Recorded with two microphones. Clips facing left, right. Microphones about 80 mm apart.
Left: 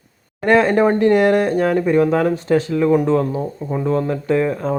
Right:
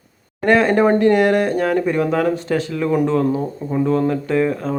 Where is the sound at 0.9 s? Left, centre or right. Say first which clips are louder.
Even; centre.